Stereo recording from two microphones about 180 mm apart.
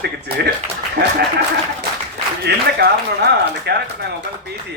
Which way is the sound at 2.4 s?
65° right (ahead or behind).